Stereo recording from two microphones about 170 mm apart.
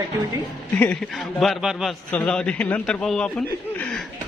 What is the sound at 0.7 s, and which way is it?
Speech, 10° left (ahead or behind).